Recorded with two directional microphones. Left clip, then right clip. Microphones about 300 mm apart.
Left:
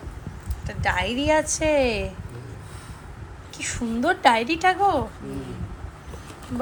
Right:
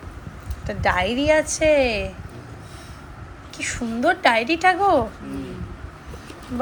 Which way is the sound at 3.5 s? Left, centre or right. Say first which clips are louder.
Right 2 dB; centre.